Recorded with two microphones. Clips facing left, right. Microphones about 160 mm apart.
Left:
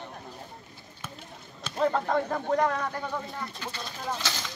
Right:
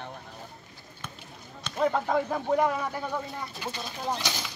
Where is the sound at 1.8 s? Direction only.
5° right (ahead or behind).